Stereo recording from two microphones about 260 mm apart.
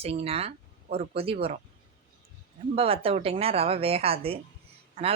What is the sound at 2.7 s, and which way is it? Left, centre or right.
Speech, right.